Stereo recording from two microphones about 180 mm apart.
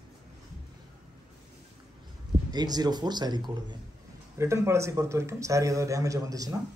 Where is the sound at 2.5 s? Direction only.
20° right (ahead or behind).